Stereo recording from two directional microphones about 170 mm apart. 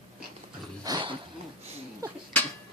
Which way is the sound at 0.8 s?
25° right (ahead or behind).